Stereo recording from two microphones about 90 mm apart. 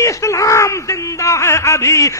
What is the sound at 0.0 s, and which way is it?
Speech, 35° left (ahead or behind).